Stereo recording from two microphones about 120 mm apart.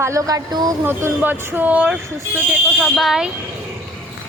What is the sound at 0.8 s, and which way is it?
Speech, 15° right (ahead or behind).